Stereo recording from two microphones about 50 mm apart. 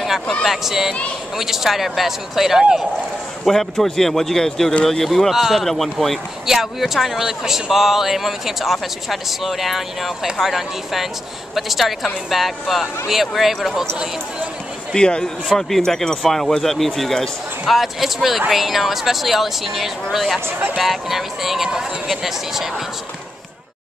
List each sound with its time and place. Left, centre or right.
0.4 s speech: centre
3.4 s speech: centre
5.3 s speech: centre
6.4 s speech: centre
15.0 s speech: centre
15.4 s speech: centre
15.8 s speech: centre
17.6 s speech: centre